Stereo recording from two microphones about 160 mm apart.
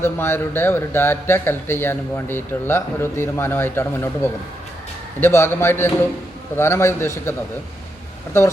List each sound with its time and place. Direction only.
0.0 s speech: 15° left (ahead or behind)